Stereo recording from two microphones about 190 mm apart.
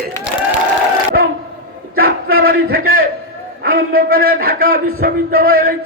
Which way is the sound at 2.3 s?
50° right (ahead or behind).